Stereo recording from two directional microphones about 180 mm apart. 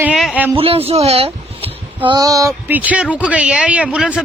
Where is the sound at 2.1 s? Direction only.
20° right (ahead or behind).